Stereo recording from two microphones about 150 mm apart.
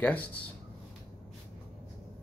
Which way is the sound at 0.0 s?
10° left (ahead or behind).